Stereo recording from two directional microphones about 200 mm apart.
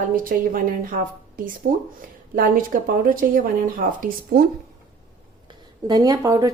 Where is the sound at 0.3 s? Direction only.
45° right (ahead or behind).